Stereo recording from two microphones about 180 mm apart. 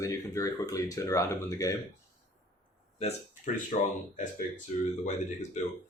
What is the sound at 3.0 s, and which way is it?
Speech, 40° left (ahead or behind).